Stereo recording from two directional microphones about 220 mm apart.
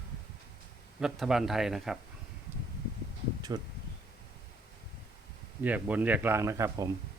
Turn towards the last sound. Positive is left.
turn(degrees=-15)  # may be behind; listen again after turning